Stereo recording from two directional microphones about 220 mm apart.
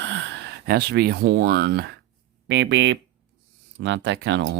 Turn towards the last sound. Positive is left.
turn(degrees=-55)  # may be behind; listen again after turning